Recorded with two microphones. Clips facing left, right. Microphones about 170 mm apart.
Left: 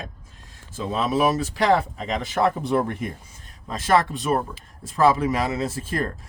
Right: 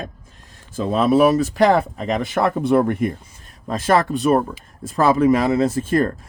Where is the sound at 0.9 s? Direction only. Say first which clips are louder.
Right 7 dB; 55° right (ahead or behind).